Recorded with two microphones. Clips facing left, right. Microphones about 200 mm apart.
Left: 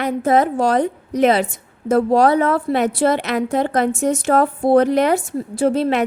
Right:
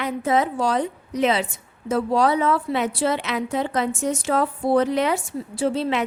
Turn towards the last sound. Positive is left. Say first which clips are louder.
# left 5 dB
turn(degrees=50)  # may be behind; listen again after turning